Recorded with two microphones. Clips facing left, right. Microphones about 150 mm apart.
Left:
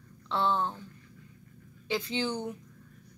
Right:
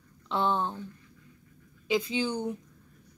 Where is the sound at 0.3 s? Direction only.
15° right (ahead or behind).